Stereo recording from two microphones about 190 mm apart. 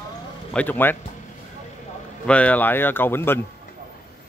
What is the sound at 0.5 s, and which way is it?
Speech, 10° left (ahead or behind).